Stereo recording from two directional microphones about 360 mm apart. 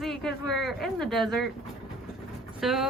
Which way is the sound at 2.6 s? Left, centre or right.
Centre.